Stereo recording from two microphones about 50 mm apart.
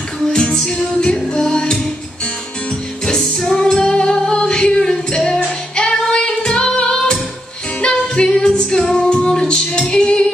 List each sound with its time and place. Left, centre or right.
0.3 s music: centre
3.1 s music: centre
6.0 s female singing: centre
7.8 s music: centre